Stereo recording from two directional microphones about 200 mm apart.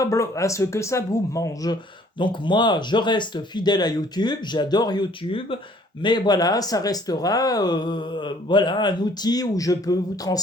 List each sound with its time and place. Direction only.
0.0 s speech: 15° left (ahead or behind)